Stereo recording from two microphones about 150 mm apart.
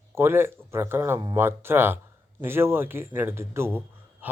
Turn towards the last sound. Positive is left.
turn(degrees=-15)  # may be behind; listen again after turning